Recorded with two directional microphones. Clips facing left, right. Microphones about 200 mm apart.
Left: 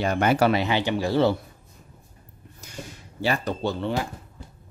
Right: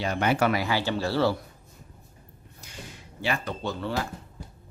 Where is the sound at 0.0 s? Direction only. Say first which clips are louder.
Left 4 dB; 50° left (ahead or behind).